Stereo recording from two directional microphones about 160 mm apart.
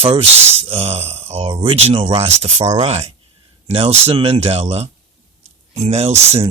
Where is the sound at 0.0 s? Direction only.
35° right (ahead or behind).